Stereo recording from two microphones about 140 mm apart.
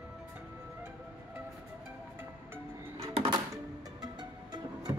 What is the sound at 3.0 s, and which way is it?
Music, 45° right (ahead or behind).